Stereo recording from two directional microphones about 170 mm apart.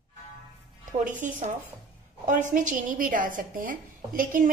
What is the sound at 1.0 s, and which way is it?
A woman's voice, 50° right (ahead or behind).